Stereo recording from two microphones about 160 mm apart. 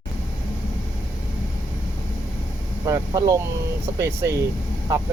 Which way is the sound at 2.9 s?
20° right (ahead or behind).